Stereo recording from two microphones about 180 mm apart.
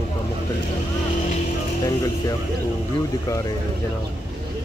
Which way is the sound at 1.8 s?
20° left (ahead or behind).